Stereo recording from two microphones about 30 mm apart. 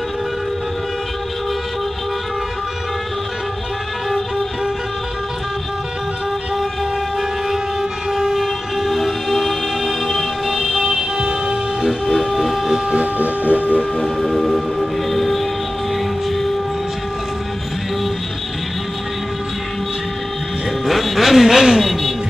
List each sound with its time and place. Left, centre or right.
8.1 s train: centre
11.1 s vehicle: right
12.1 s a sound: centre
13.2 s a sound: right
14.0 s music: centre
20.8 s music: centre